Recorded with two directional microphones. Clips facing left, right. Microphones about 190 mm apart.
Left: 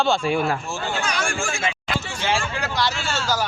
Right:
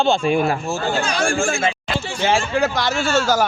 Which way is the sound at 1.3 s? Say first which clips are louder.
Right 6 dB; 50° right (ahead or behind).